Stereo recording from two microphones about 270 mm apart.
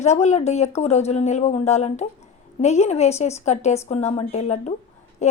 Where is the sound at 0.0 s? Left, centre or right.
Left.